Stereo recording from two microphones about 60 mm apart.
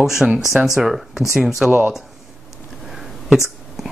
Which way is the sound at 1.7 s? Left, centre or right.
Right.